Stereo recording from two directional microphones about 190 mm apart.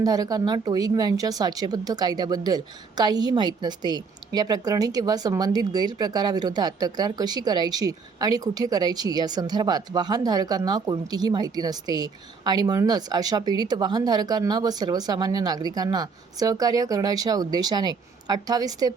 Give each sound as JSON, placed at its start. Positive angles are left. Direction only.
{"t": 0.0, "sound": "speech", "side_deg": -20}